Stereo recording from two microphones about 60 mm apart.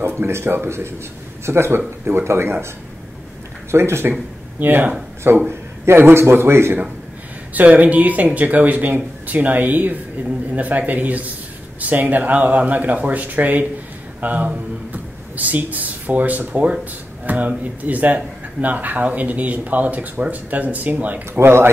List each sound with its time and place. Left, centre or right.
0.0 s speech: right
3.7 s speech: right
4.6 s speech: right
5.5 s a man's voice: right
7.5 s speech: right
21.4 s speech: right